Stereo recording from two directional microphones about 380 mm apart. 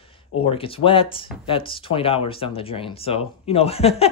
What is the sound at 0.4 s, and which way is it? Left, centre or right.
Speech, centre.